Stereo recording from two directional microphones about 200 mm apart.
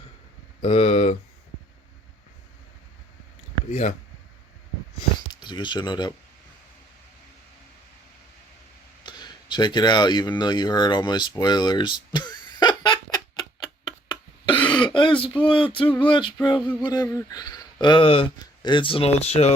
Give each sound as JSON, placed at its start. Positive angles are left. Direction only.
{"t": 0.6, "sound": "speech", "side_deg": 30}
{"t": 3.7, "sound": "speech", "side_deg": 35}
{"t": 5.3, "sound": "speech", "side_deg": 20}
{"t": 9.0, "sound": "a sound", "side_deg": 20}
{"t": 15.4, "sound": "speech", "side_deg": 25}